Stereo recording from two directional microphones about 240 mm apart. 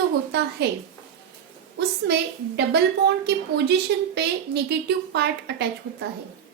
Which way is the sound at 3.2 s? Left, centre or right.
Right.